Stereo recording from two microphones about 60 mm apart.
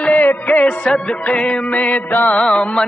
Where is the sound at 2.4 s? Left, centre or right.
Centre.